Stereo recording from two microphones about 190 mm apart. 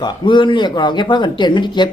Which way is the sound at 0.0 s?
25° left (ahead or behind).